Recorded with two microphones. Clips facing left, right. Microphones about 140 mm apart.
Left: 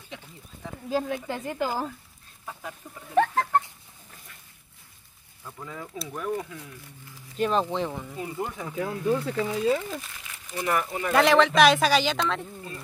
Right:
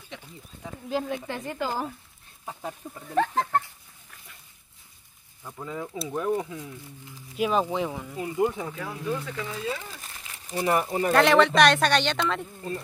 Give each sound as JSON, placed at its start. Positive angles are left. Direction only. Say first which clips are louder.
{"t": 0.8, "sound": "speech", "louder": "left 1 dB", "side_deg": 0}
{"t": 2.8, "sound": "speech", "louder": "right 4 dB", "side_deg": -25}
{"t": 5.4, "sound": "speech", "louder": "right 4 dB", "side_deg": -15}
{"t": 7.3, "sound": "speech", "louder": "even", "side_deg": -5}
{"t": 8.2, "sound": "speech", "louder": "right 8 dB", "side_deg": -15}
{"t": 8.7, "sound": "speech", "louder": "left 5 dB", "side_deg": 30}
{"t": 10.2, "sound": "speech", "louder": "right 4 dB", "side_deg": -30}
{"t": 11.1, "sound": "speech", "louder": "even", "side_deg": 0}